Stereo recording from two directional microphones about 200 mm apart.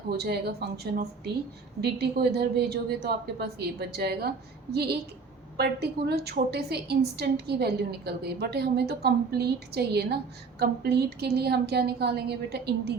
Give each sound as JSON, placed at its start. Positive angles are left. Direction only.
{"t": 0.1, "sound": "a woman's voice", "side_deg": -55}